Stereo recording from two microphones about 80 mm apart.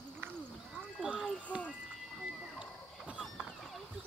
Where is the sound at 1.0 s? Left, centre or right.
Centre.